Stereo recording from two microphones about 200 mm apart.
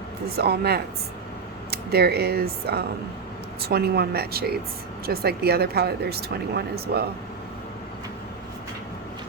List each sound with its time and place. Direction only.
0.3 s speech: 50° right (ahead or behind)